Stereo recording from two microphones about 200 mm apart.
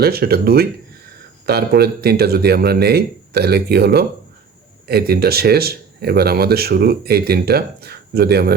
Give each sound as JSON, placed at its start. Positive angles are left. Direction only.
{"t": 0.0, "sound": "speech", "side_deg": -50}